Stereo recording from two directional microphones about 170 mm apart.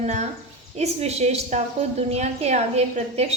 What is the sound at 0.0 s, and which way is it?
A woman's voice, 40° right (ahead or behind).